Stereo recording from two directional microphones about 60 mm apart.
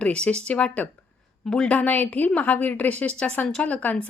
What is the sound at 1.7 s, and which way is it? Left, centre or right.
A woman's voice, left.